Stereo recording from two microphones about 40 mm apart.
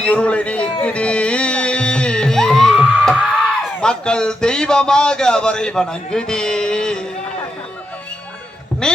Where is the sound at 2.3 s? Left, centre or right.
Centre.